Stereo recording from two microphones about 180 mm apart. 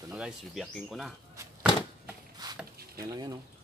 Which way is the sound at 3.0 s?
20° right (ahead or behind).